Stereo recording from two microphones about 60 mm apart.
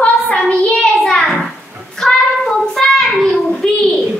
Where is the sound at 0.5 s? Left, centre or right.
Centre.